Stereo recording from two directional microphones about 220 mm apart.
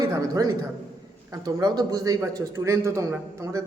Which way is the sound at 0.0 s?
15° right (ahead or behind).